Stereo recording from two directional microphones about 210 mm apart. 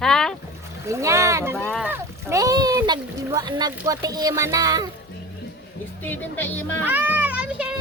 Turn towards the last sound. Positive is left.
turn(degrees=-5)  # may be behind; listen again after turning